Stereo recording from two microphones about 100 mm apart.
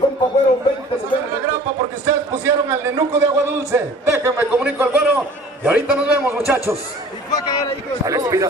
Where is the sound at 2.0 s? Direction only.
30° right (ahead or behind); by 6.2 s 10° right (ahead or behind).